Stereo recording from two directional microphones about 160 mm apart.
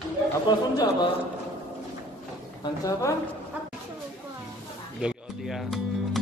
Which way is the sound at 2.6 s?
20° left (ahead or behind).